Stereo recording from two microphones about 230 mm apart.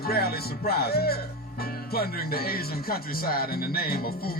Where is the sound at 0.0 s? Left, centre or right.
Left.